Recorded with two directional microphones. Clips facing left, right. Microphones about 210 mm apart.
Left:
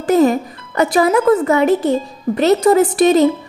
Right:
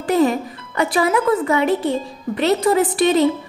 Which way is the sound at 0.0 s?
45° left (ahead or behind).